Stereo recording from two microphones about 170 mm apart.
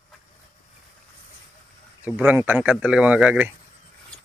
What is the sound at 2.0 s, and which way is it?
Speech, 10° right (ahead or behind).